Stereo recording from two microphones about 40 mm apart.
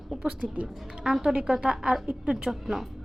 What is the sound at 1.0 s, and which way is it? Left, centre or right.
Speech, centre.